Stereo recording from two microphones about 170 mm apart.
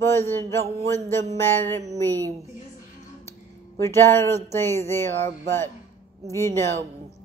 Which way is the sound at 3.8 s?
15° left (ahead or behind).